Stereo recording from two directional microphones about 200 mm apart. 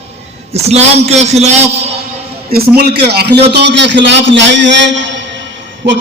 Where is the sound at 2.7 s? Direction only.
50° right (ahead or behind).